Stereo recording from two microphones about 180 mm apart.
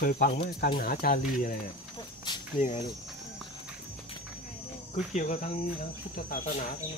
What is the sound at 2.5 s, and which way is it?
Speech, 40° left (ahead or behind).